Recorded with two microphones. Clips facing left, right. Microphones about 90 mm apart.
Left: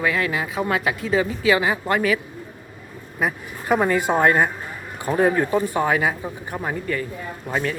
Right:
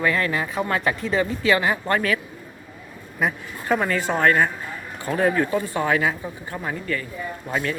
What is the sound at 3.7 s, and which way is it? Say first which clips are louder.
Speech: left 3 dB; 15° left (ahead or behind).